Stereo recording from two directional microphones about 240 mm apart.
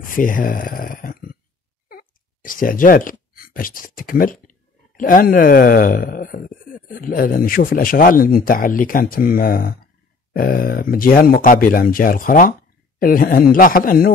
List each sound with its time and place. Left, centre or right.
0.0 s speech: left